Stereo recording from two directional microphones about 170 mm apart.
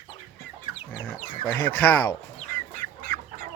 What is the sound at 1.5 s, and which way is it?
Speech, 10° left (ahead or behind).